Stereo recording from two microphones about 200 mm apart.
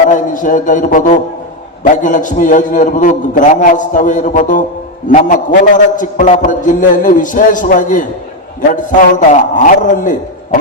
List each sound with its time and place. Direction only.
0.1 s a man's voice: 40° left (ahead or behind)